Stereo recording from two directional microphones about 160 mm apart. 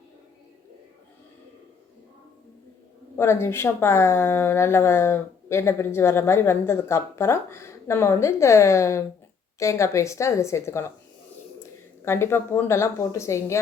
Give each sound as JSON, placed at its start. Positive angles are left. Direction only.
{"t": 3.2, "sound": "a woman's voice", "side_deg": 15}
{"t": 12.0, "sound": "a woman's voice", "side_deg": 15}